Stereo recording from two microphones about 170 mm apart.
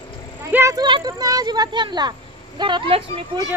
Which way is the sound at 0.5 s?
15° right (ahead or behind).